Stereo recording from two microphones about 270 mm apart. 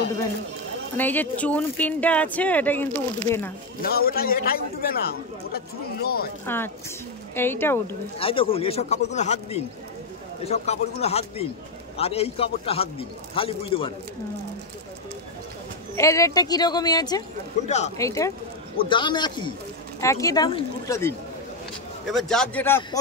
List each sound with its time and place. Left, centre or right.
0.9 s speech: centre
3.8 s a man's voice: left
6.4 s speech: centre
8.2 s a man's voice: centre
16.0 s speech: centre
17.6 s a man's voice: left
17.9 s speech: centre
22.1 s speech: centre